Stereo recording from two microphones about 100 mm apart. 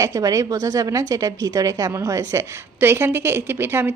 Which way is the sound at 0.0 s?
35° right (ahead or behind).